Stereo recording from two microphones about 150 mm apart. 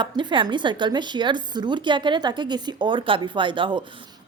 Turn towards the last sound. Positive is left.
turn(degrees=-35)  # may be behind; listen again after turning